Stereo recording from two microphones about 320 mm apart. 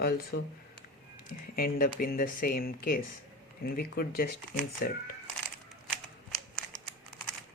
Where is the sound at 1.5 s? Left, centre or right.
Left.